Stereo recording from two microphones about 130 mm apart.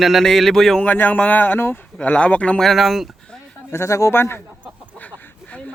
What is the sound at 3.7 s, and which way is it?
Speech, 20° left (ahead or behind).